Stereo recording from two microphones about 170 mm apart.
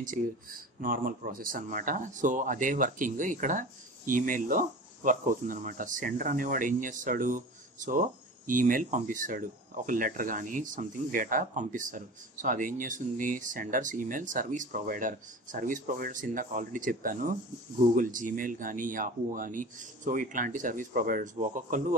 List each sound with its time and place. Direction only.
0.0 s speech: 50° right (ahead or behind)